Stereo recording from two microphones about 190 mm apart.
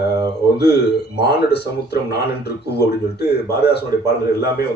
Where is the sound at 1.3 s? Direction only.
60° left (ahead or behind).